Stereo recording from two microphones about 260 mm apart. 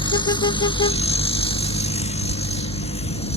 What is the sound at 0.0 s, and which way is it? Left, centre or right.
Vehicle, centre.